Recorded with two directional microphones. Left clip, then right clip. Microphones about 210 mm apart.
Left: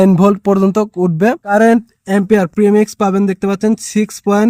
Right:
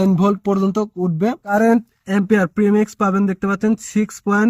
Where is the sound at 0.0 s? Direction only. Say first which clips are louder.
Left 7 dB; 60° left (ahead or behind).